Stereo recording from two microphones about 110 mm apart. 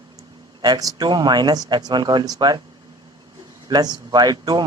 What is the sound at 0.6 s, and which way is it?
Speech, 40° right (ahead or behind).